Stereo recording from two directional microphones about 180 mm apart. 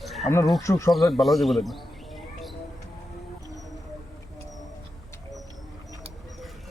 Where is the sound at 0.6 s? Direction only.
15° left (ahead or behind).